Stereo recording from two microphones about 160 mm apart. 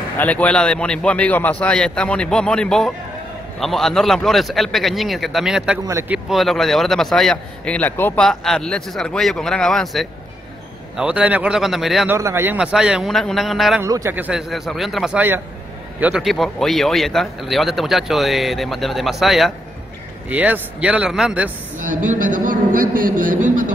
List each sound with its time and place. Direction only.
0.2 s a man's voice: 10° left (ahead or behind)
5.9 s speech: 15° right (ahead or behind)
6.1 s a man's voice: centre (ahead or behind)
12.1 s speech: 15° right (ahead or behind)
12.5 s a man's voice: 5° right (ahead or behind)
13.8 s a man's voice: 20° right (ahead or behind)
14.1 s a man's voice: 10° right (ahead or behind)
21.8 s a man's voice: 55° right (ahead or behind)